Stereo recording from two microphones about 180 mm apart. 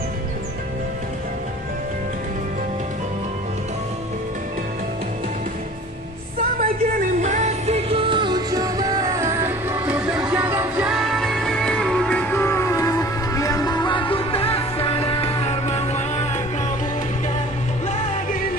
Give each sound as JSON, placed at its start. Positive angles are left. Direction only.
{"t": 6.6, "sound": "music", "side_deg": -50}
{"t": 10.9, "sound": "music", "side_deg": 0}